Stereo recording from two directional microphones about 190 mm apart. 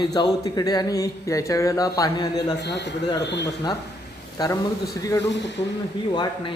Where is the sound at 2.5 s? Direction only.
65° left (ahead or behind).